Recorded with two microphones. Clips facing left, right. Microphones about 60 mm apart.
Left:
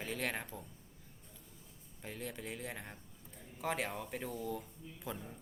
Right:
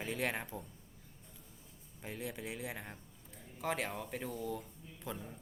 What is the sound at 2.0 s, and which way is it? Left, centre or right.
A man's voice, centre.